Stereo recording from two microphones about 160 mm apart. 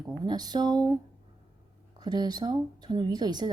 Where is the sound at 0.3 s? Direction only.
25° right (ahead or behind).